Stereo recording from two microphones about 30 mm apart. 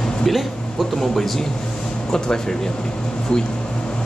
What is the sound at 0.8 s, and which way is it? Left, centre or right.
Speech, centre.